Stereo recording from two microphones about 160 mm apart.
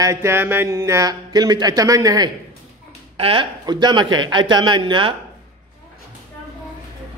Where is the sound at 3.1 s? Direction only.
35° right (ahead or behind).